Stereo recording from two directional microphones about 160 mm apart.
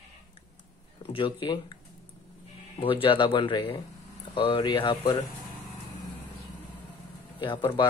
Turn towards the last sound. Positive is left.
turn(degrees=30)  # may be behind; listen again after turning